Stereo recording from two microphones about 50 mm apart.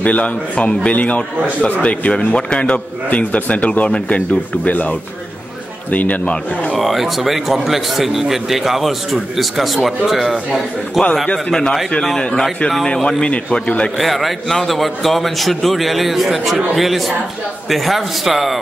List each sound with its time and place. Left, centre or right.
0.0 s speech: left
3.1 s a man's voice: left
6.8 s a man's voice: centre
12.2 s speech: centre
13.9 s a man's voice: centre